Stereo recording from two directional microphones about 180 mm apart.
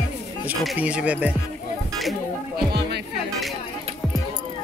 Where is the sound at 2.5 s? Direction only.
65° right (ahead or behind).